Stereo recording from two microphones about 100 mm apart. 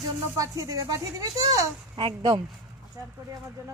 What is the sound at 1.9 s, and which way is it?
Speech, 55° right (ahead or behind).